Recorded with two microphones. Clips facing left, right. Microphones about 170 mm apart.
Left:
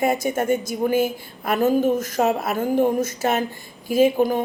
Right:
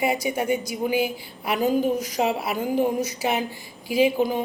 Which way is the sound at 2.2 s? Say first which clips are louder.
Left 3 dB; 45° left (ahead or behind).